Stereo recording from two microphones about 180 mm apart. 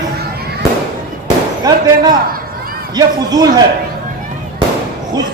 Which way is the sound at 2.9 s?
20° right (ahead or behind).